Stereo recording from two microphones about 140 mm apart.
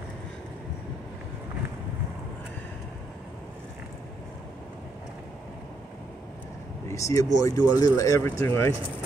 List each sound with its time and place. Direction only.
6.9 s speech: 20° left (ahead or behind)